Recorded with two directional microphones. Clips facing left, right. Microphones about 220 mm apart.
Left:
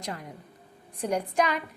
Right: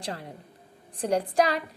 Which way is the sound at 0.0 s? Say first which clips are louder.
Right 1 dB; 30° right (ahead or behind).